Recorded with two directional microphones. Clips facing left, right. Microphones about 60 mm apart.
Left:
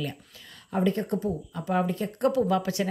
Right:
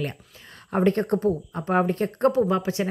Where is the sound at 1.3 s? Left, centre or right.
Right.